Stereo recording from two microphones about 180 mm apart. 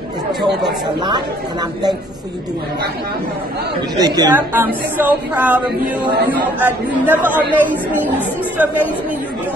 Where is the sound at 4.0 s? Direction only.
20° right (ahead or behind).